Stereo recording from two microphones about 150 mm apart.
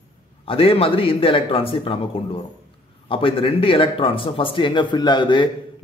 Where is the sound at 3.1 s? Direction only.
35° left (ahead or behind).